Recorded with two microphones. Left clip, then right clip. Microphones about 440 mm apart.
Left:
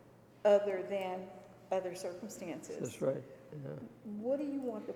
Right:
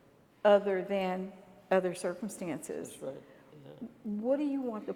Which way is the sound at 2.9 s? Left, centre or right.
Left.